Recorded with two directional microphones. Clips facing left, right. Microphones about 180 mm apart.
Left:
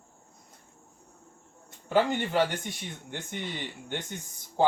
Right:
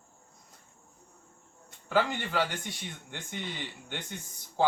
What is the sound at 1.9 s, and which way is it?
Speech, 20° left (ahead or behind).